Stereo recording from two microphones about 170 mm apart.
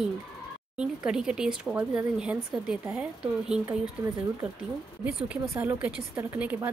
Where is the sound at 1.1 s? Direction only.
5° right (ahead or behind).